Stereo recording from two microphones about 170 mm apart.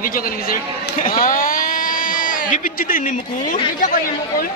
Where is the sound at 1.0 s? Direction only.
55° left (ahead or behind).